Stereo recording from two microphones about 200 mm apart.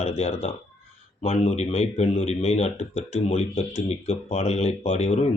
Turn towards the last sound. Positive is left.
turn(degrees=35)  # may be behind; listen again after turning